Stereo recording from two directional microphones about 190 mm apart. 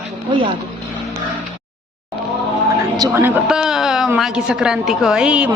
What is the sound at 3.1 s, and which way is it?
A woman's voice, 10° right (ahead or behind).